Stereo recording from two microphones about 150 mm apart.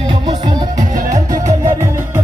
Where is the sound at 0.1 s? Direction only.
30° right (ahead or behind).